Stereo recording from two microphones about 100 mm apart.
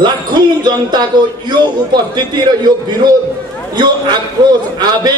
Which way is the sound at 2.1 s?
45° right (ahead or behind).